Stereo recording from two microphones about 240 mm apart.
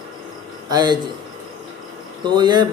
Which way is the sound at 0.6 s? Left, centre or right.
Centre.